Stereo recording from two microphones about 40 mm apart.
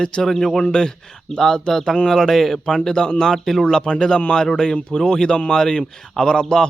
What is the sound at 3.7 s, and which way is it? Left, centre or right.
Speech, centre.